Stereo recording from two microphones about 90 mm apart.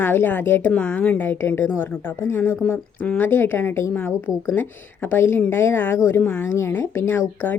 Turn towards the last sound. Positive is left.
turn(degrees=20)  # may be behind; listen again after turning